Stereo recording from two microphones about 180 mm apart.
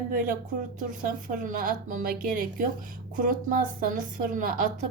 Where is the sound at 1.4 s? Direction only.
45° right (ahead or behind).